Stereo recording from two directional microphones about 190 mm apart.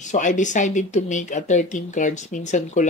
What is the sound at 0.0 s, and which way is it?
Speech, 40° left (ahead or behind).